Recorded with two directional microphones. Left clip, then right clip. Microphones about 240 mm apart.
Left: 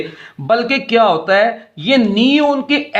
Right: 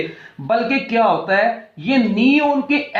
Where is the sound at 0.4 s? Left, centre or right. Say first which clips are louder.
Left 3 dB; left.